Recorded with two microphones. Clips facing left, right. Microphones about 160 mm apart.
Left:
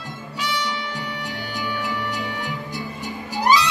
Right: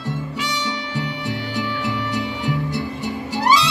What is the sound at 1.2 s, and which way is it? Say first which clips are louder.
Music: right 4 dB; 75° right (ahead or behind).